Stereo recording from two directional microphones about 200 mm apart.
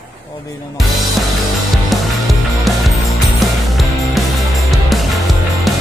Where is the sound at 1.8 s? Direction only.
Centre (ahead or behind).